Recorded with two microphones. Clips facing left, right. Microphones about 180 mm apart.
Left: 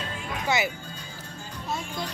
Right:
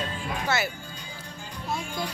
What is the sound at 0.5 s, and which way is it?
Music, 15° left (ahead or behind).